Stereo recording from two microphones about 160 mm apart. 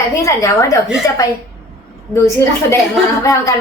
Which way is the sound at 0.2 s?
20° left (ahead or behind).